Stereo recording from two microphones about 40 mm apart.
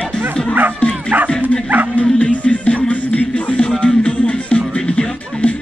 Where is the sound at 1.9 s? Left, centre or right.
Left.